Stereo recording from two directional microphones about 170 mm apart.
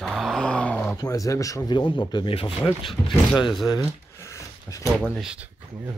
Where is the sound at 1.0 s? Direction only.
20° left (ahead or behind).